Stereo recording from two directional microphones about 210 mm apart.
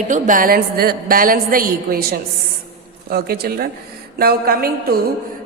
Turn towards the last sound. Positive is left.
turn(degrees=-45)  # may be behind; listen again after turning